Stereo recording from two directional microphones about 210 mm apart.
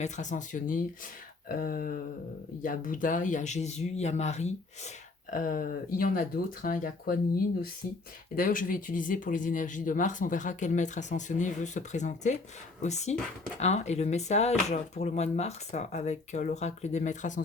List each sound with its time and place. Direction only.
0.0 s speech: 35° left (ahead or behind)
1.5 s a sound: 45° left (ahead or behind)
2.6 s speech: 40° left (ahead or behind)
8.4 s speech: 40° left (ahead or behind)